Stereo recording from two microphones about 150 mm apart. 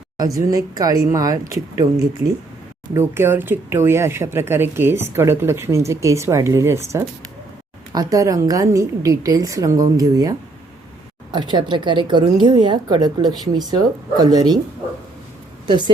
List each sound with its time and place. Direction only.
0.3 s speech: 25° right (ahead or behind)
15.6 s speech: 30° right (ahead or behind)